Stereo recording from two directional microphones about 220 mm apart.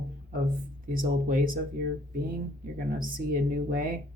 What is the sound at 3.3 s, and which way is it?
Speech, 40° right (ahead or behind).